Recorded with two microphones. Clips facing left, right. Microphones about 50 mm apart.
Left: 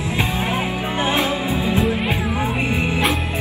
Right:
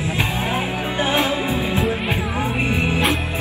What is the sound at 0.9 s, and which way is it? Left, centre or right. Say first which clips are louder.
Music: even; left.